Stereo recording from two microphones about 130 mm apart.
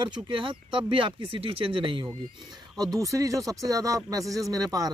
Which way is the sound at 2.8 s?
25° right (ahead or behind).